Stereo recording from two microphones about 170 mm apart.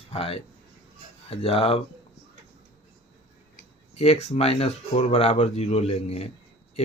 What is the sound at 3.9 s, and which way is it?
Speech, 35° left (ahead or behind).